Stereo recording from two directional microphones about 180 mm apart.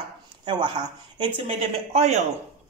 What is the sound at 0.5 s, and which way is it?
Speech, 25° right (ahead or behind).